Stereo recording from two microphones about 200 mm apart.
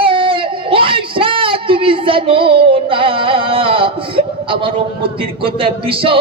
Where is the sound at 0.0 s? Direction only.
25° right (ahead or behind).